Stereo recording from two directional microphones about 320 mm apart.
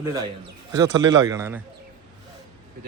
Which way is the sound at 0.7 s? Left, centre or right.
Centre.